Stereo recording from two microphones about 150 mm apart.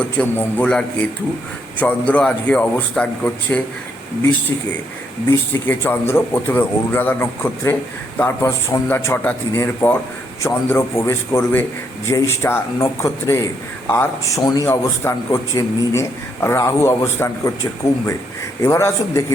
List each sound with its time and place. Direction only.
0.0 s a man's voice: 10° left (ahead or behind)
18.6 s a man's voice: 20° left (ahead or behind)